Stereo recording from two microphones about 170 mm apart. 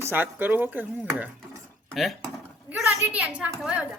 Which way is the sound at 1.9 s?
Centre (ahead or behind).